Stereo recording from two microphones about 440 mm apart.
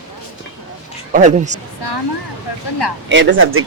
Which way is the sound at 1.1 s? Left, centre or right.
Centre.